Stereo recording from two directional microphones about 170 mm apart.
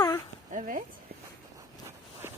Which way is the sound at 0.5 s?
50° right (ahead or behind).